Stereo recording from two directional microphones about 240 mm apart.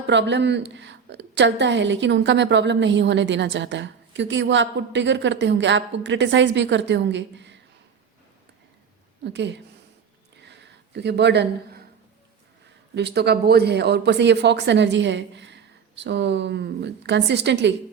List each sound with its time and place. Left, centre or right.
0.1 s a woman's voice: right
9.2 s a woman's voice: right
10.4 s a sound: right
12.9 s a woman's voice: right